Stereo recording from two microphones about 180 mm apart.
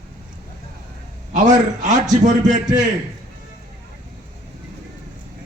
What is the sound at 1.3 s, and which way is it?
A man's voice, 45° right (ahead or behind).